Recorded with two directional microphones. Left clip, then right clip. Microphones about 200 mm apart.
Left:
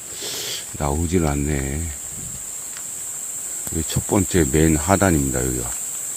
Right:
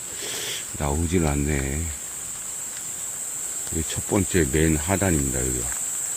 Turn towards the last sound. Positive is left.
turn(degrees=30)  # may be behind; listen again after turning